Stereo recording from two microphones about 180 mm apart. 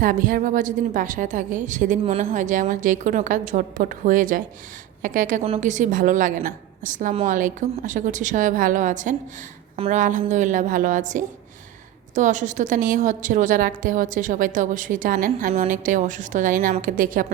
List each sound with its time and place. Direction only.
0.0 s a woman's voice: 50° right (ahead or behind)